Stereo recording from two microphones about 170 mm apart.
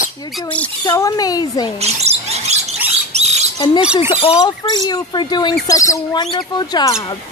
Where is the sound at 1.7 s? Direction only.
40° right (ahead or behind).